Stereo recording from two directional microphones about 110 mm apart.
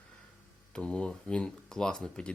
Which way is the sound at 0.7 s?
10° left (ahead or behind).